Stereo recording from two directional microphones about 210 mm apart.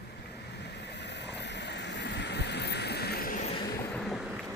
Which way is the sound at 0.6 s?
55° left (ahead or behind).